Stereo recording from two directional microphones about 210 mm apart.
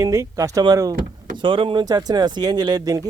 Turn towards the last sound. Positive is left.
turn(degrees=-15)  # may be behind; listen again after turning